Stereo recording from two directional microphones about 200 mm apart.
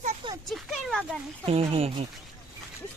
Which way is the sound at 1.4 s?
30° right (ahead or behind).